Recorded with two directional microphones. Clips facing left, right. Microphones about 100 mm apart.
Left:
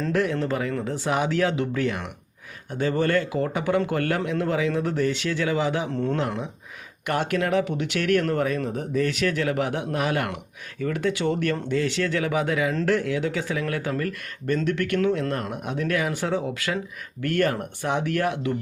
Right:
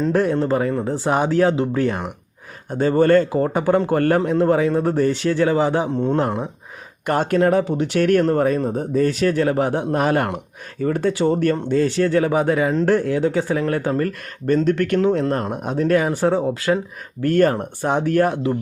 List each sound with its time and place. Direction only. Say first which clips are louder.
0.1 s speech: right 4 dB; 35° right (ahead or behind)